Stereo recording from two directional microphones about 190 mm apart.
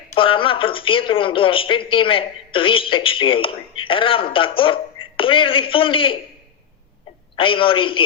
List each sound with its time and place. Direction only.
0.1 s speech: 25° left (ahead or behind)
7.3 s speech: 25° left (ahead or behind)